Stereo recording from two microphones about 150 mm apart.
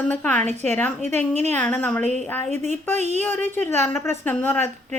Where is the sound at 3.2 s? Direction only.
15° left (ahead or behind).